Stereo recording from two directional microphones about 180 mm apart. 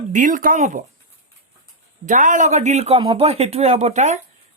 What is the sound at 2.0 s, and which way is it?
Speech, 45° right (ahead or behind).